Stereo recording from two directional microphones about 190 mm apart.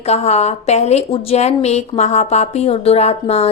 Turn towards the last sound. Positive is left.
turn(degrees=35)  # may be behind; listen again after turning